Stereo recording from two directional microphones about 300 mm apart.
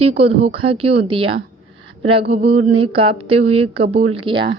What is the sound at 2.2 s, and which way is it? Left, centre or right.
Mantra, right.